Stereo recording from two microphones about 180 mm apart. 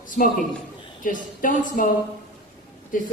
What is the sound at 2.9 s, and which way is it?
Speech, 50° left (ahead or behind).